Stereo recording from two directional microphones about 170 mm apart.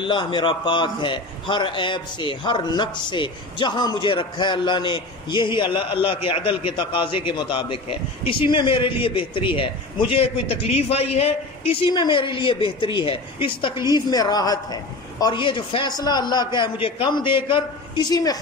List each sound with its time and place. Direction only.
0.0 s a man's voice: 30° left (ahead or behind)